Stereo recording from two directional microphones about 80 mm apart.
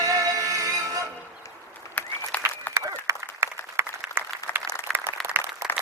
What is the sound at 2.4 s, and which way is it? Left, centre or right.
Applause, right.